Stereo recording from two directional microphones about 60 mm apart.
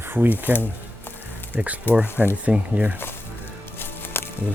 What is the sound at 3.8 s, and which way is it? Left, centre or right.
Music, left.